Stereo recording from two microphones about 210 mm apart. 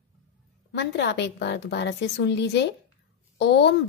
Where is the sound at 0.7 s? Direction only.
55° left (ahead or behind).